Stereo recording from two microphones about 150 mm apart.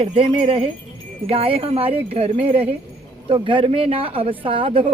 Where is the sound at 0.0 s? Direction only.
35° right (ahead or behind).